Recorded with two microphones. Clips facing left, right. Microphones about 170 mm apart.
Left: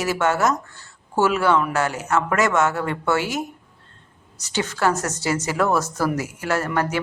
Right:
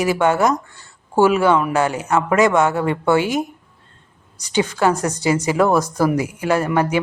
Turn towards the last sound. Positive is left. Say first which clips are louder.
# right 5 dB
turn(degrees=-15)  # may be behind; listen again after turning